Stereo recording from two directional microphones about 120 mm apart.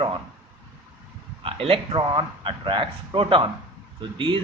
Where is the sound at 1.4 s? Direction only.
50° right (ahead or behind).